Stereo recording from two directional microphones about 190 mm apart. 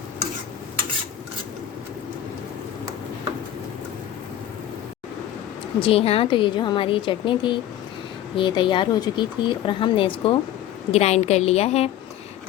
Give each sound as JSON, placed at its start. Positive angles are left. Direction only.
{"t": 5.8, "sound": "a woman's voice", "side_deg": 30}